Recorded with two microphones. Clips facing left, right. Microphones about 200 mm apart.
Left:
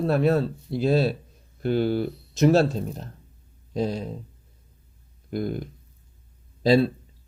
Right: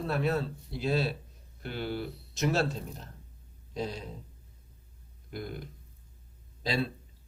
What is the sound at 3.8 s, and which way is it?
Speech, 40° left (ahead or behind).